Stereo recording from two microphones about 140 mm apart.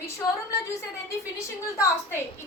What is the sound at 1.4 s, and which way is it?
Speech, 15° left (ahead or behind).